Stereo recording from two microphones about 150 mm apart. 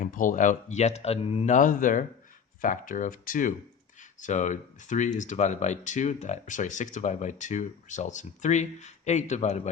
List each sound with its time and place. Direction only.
0.0 s speech: 65° left (ahead or behind); by 1.5 s 40° left (ahead or behind)
1.5 s speech: 65° left (ahead or behind)
4.2 s speech: 55° left (ahead or behind)